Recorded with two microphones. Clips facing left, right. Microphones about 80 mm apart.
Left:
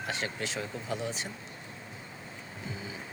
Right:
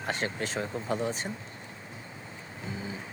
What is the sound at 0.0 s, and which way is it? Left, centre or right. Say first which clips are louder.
Speech: right 3 dB; right.